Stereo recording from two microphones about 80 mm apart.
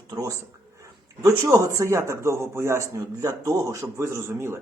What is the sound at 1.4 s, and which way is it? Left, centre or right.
Speech, right.